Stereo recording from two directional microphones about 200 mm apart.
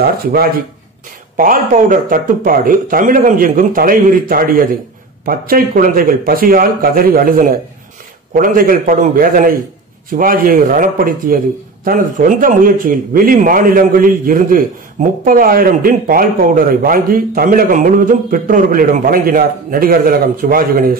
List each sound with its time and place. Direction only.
0.0 s a man's voice: 50° right (ahead or behind)